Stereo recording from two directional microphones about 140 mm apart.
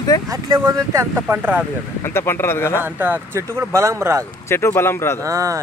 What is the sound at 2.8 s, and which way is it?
Speech, 15° right (ahead or behind).